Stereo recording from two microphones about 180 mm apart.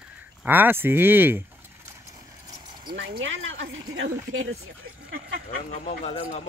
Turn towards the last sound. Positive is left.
turn(degrees=40)  # may be behind; listen again after turning